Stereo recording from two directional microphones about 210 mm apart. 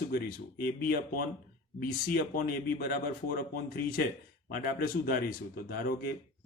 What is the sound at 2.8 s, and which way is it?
Speech, 40° left (ahead or behind).